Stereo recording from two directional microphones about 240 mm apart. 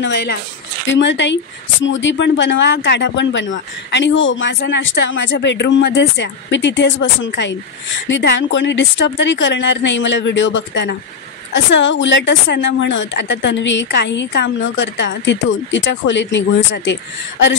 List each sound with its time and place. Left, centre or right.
0.0 s a woman's voice: left